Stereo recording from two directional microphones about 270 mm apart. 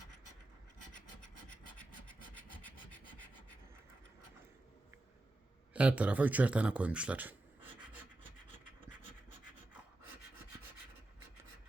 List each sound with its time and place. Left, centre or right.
2.0 s rub: centre
5.7 s speech: centre